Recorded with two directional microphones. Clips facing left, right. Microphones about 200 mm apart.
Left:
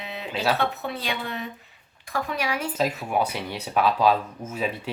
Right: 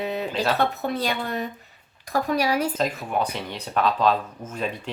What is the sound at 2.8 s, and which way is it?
Speech, 5° left (ahead or behind).